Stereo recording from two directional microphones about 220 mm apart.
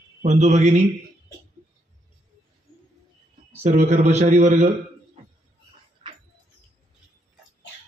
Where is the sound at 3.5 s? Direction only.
30° right (ahead or behind).